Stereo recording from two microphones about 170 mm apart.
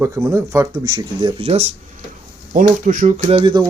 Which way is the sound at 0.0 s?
15° right (ahead or behind).